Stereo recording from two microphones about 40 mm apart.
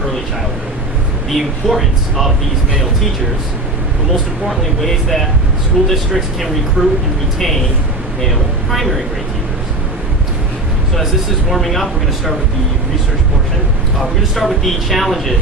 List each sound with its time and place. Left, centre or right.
1.3 s speech: centre
4.4 s speech: centre
6.8 s a woman's voice: centre
7.3 s speech: centre
11.0 s speech: centre
14.0 s speech: centre